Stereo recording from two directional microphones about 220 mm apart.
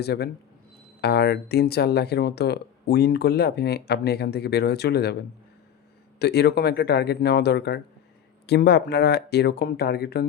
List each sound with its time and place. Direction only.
0.0 s speech: 45° left (ahead or behind)
6.1 s speech: 50° left (ahead or behind)